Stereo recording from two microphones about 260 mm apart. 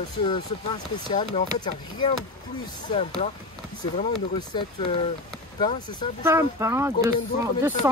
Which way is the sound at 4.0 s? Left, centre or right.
Centre.